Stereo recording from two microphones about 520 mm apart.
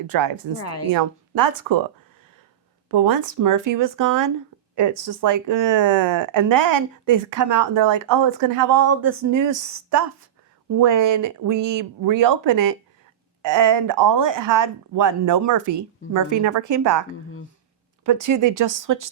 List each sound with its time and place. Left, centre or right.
0.6 s a woman's voice: left
0.9 s speech: right
2.9 s speech: right